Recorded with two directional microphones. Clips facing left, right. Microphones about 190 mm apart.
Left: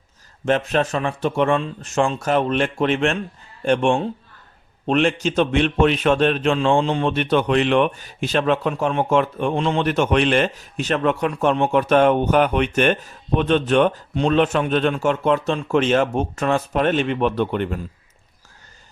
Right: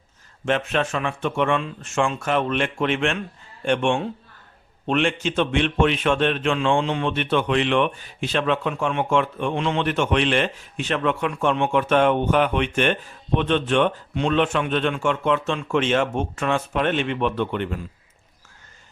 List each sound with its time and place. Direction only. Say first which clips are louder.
0.4 s a man's voice: left 3 dB; 40° left (ahead or behind)